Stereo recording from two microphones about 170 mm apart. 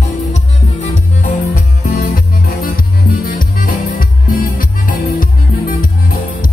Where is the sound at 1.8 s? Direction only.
60° left (ahead or behind).